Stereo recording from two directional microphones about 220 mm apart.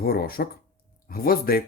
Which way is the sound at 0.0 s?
45° left (ahead or behind).